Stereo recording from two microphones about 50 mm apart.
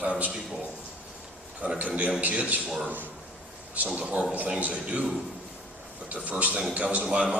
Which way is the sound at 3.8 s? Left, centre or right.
Centre.